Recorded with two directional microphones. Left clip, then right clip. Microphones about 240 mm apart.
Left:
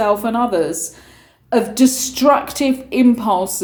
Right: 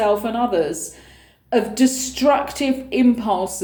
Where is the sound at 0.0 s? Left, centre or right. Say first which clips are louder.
Left 2 dB; left.